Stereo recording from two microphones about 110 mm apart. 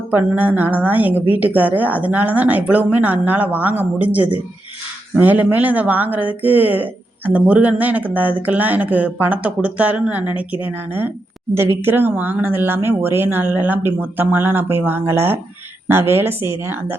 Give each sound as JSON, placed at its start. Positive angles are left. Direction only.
{"t": 0.1, "sound": "speech", "side_deg": -15}